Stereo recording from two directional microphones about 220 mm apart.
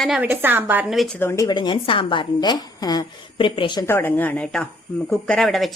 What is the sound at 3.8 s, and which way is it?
A woman's voice, 10° left (ahead or behind).